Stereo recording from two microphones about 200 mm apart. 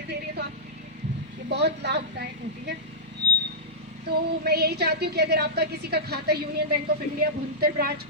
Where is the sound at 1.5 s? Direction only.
60° right (ahead or behind).